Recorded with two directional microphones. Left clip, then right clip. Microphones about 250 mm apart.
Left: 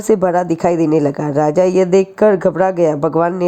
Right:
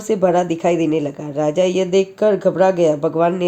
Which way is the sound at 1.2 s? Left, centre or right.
Left.